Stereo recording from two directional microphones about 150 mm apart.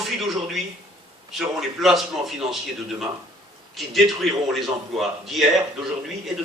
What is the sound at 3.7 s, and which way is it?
A man's voice, centre (ahead or behind).